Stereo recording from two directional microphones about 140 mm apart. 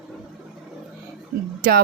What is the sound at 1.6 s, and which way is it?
Speech, 90° right.